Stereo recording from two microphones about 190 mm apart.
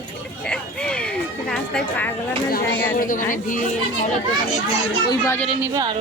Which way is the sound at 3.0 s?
45° left (ahead or behind).